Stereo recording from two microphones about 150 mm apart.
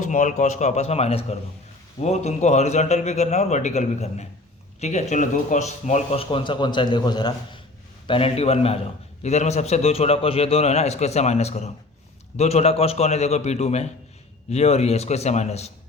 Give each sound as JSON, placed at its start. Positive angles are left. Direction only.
{"t": 0.0, "sound": "a man's voice", "side_deg": 55}